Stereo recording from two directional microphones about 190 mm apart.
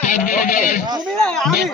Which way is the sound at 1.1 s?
5° left (ahead or behind).